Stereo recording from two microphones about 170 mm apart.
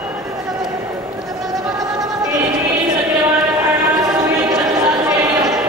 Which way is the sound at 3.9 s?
20° right (ahead or behind).